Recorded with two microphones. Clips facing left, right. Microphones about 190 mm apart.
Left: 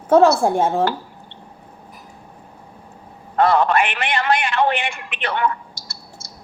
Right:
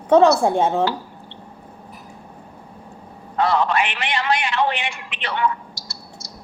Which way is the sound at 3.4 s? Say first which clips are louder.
Left 3 dB; 55° left (ahead or behind).